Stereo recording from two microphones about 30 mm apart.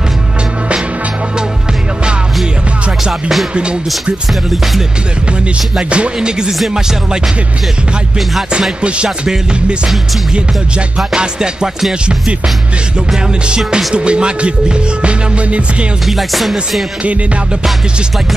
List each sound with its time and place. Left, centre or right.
3.0 s music: centre
5.9 s speech: right
6.1 s music: right
8.8 s speech: right
11.1 s music: right
11.9 s speech: right
13.9 s speech: right
16.1 s music: centre